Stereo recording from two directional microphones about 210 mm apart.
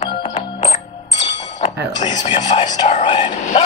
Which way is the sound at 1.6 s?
20° left (ahead or behind).